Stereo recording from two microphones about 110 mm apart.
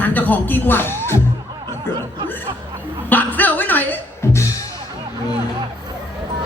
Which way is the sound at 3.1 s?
15° left (ahead or behind).